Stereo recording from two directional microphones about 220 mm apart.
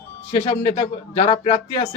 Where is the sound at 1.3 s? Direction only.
25° left (ahead or behind).